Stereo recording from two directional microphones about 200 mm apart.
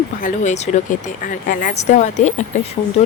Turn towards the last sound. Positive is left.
turn(degrees=35)  # may be behind; listen again after turning